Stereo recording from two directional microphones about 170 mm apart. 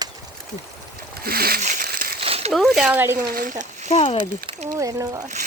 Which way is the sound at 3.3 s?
55° right (ahead or behind).